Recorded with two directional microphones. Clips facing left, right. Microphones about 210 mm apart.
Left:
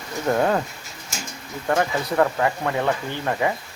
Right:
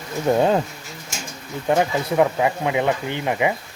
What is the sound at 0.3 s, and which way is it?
Speech, 20° right (ahead or behind).